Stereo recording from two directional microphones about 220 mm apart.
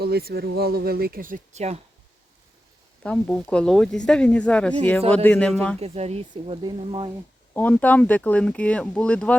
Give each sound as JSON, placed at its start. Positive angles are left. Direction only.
{"t": 0.0, "sound": "speech", "side_deg": -45}
{"t": 3.0, "sound": "speech", "side_deg": 5}
{"t": 5.8, "sound": "speech", "side_deg": -30}
{"t": 7.5, "sound": "speech", "side_deg": 10}